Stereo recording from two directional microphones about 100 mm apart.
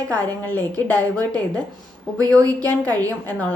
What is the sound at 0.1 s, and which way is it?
A woman's voice, 15° left (ahead or behind).